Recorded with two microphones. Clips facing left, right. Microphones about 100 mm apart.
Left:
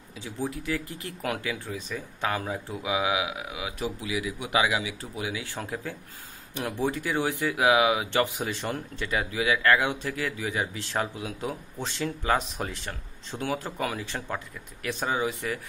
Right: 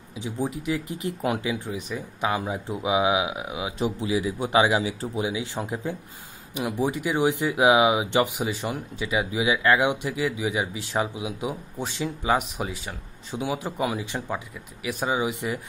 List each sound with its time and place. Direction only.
0.2 s speech: 15° right (ahead or behind)